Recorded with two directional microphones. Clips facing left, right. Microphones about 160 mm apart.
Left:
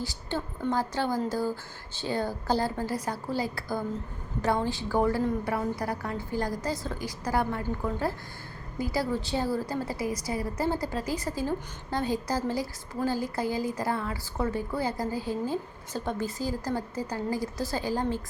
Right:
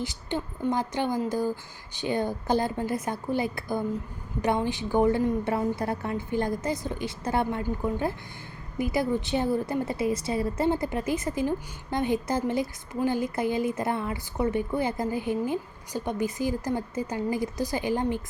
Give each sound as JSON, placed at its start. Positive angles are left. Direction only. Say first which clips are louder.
{"t": 0.0, "sound": "a woman's voice", "louder": "right 2 dB", "side_deg": -20}